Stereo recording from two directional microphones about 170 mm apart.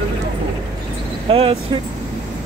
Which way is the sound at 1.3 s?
35° right (ahead or behind).